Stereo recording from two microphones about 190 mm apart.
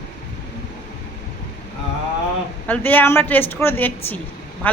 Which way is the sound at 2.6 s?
10° left (ahead or behind).